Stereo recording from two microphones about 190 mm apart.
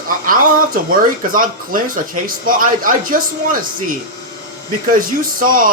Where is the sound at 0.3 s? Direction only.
50° right (ahead or behind).